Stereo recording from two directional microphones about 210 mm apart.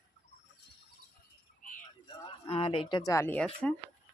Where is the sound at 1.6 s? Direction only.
40° left (ahead or behind).